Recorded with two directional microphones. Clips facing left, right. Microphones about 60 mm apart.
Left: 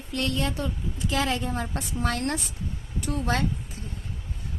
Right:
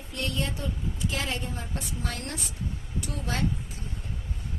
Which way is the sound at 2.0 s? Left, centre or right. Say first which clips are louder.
Left 11 dB; left.